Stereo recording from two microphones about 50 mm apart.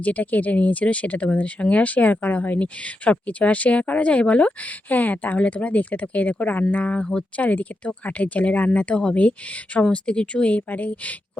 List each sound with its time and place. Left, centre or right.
0.0 s speech: left
7.3 s speech: left